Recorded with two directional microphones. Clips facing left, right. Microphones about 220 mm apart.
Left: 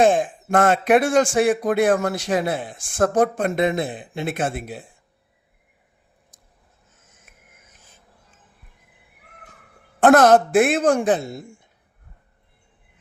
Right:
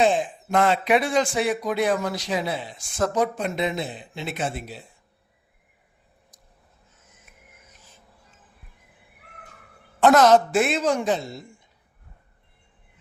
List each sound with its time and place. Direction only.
0.0 s speech: 50° left (ahead or behind)
10.0 s a woman's voice: 50° left (ahead or behind)